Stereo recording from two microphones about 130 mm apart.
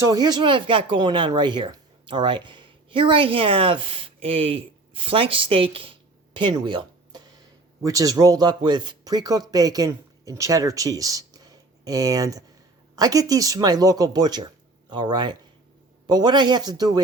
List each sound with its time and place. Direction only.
0.0 s speech: 30° right (ahead or behind)